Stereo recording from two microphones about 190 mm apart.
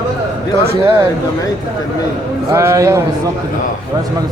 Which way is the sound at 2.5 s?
15° right (ahead or behind).